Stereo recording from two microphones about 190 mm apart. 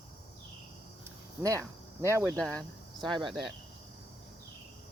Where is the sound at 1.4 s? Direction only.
15° right (ahead or behind).